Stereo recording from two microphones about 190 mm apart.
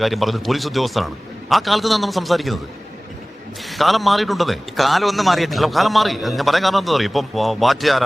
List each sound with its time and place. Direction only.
0.0 s a man's voice: centre (ahead or behind)
3.7 s a man's voice: centre (ahead or behind)